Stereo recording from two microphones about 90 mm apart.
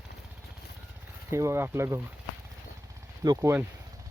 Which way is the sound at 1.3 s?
30° right (ahead or behind).